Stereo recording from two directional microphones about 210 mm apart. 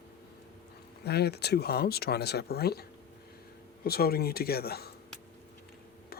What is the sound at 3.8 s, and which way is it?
Speech, 45° left (ahead or behind).